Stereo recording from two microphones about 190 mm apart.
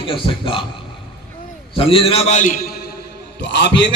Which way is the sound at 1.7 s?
30° left (ahead or behind).